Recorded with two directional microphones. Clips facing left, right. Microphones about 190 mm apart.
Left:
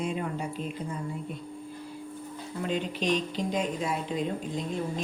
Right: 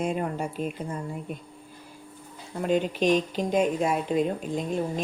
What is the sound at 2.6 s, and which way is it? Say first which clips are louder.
A woman's voice: right 6 dB; 50° right (ahead or behind).